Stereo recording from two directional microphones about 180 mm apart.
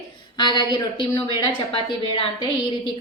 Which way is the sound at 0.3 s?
25° left (ahead or behind).